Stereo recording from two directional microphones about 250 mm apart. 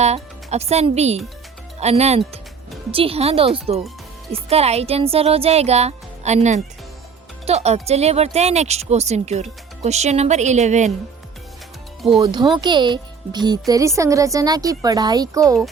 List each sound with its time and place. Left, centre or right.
0.0 s speech: right
12.2 s speech: centre